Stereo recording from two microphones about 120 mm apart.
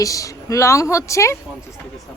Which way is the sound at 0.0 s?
30° left (ahead or behind).